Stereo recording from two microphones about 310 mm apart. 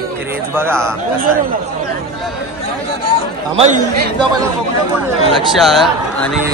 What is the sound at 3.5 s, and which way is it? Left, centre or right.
Speech, right.